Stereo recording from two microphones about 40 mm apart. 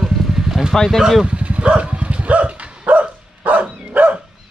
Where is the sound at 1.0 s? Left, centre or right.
Centre.